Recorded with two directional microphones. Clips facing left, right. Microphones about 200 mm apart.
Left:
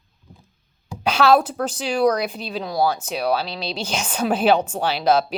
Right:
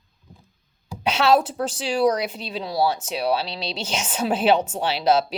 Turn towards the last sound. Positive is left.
turn(degrees=-25)  # may be behind; listen again after turning